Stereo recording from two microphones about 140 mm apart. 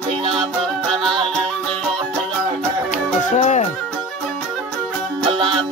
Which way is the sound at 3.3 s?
50° left (ahead or behind).